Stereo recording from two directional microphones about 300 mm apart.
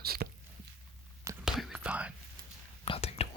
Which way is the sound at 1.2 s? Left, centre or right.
Centre.